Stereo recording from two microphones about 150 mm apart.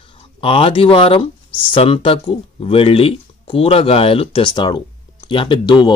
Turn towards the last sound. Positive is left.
turn(degrees=30)  # may be behind; listen again after turning